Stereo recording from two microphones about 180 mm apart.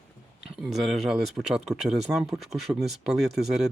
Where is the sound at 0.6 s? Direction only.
Centre (ahead or behind).